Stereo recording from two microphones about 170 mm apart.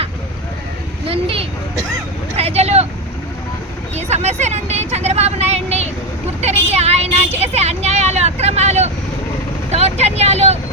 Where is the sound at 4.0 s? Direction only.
40° right (ahead or behind).